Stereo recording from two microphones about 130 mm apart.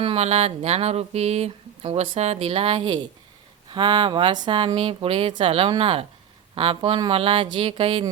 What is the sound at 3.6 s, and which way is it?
Speech, 35° right (ahead or behind).